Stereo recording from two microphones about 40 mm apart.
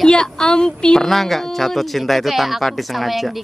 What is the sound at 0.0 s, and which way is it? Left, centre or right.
A woman's voice, centre.